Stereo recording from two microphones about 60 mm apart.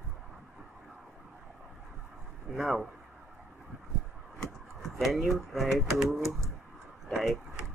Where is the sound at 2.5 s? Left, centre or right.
Centre.